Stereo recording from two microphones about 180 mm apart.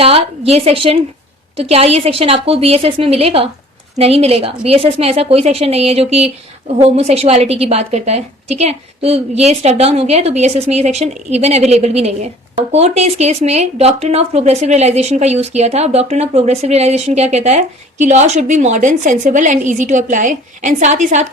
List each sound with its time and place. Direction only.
0.0 s speech: 35° right (ahead or behind)